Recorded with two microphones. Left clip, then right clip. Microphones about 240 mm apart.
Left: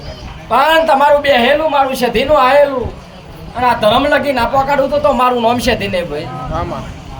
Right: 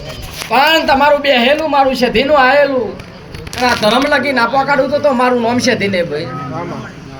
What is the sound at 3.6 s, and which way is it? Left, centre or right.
Speech, centre.